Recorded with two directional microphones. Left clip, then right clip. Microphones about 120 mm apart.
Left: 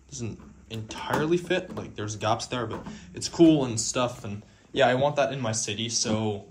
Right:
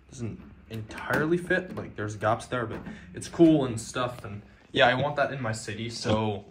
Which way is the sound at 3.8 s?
20° left (ahead or behind).